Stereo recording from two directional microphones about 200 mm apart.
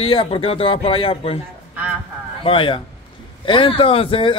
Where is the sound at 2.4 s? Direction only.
25° left (ahead or behind).